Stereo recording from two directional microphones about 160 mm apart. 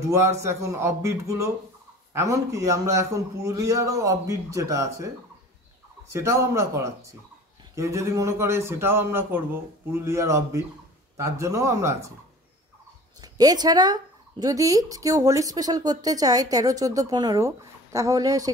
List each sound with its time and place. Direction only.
0.1 s speech: 20° right (ahead or behind)
6.1 s a man's voice: 20° right (ahead or behind)
13.2 s speech: 25° right (ahead or behind)